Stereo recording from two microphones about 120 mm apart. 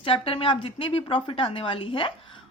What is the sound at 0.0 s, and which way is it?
A woman's voice, 50° left (ahead or behind).